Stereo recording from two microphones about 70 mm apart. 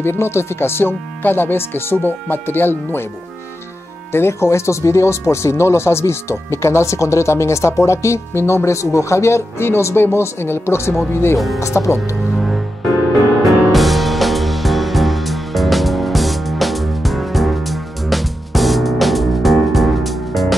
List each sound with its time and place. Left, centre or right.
0.0 s speech: left
4.1 s speech: left
11.3 s speech: centre
11.6 s speech: left
13.4 s music: centre